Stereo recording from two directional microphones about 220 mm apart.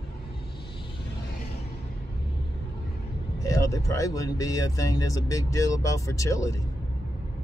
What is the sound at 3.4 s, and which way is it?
Speech, 15° left (ahead or behind).